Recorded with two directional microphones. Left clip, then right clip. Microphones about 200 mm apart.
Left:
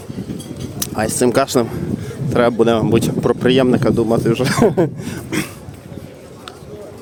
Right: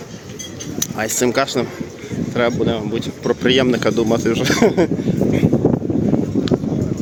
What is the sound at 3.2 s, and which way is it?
Speech, 20° left (ahead or behind).